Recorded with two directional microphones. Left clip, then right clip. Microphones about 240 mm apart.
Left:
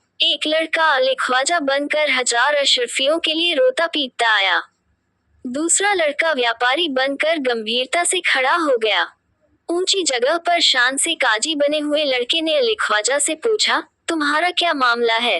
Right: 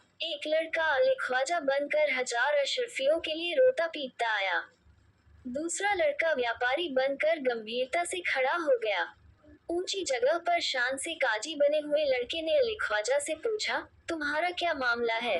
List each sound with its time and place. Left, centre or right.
0.3 s speech: left